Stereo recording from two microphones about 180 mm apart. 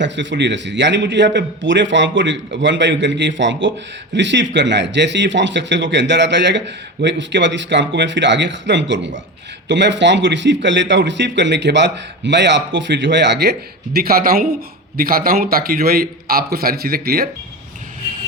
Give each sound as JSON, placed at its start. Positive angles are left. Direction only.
{"t": 0.0, "sound": "a man's voice", "side_deg": -85}
{"t": 4.1, "sound": "a man's voice", "side_deg": -75}